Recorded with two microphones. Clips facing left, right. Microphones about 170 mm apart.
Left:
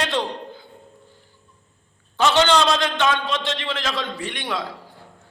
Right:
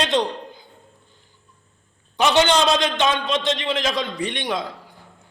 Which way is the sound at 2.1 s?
15° right (ahead or behind).